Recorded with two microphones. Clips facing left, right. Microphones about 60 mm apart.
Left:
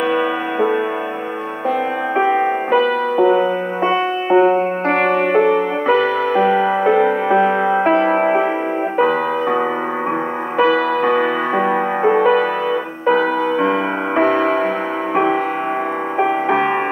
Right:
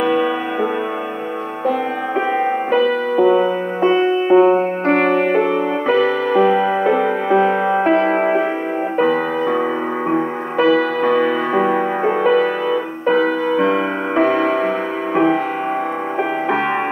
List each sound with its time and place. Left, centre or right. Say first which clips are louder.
0.0 s music: right 1 dB; centre
2.7 s music: even; centre
4.9 s music: even; left
5.9 s music: even; centre
7.0 s music: left 2 dB; left
7.3 s music: right 2 dB; centre
8.2 s music: left 1 dB; left
13.1 s music: even; centre
13.6 s music: even; centre